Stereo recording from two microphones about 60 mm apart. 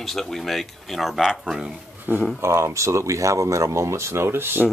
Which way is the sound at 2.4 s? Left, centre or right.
Right.